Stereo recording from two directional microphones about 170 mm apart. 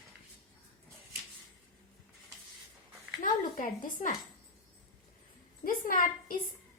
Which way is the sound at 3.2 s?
50° left (ahead or behind).